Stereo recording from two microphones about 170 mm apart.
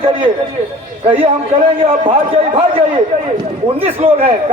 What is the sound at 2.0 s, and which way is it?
Speech, 30° right (ahead or behind).